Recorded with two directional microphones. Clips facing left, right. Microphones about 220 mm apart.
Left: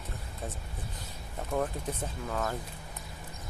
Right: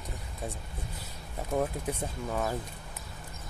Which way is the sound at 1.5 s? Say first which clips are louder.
Right 2 dB; 10° right (ahead or behind).